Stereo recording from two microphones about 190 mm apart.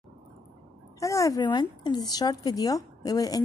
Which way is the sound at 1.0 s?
15° left (ahead or behind).